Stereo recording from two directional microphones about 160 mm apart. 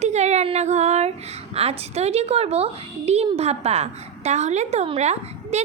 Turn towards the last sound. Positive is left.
turn(degrees=-45)  # may be behind; listen again after turning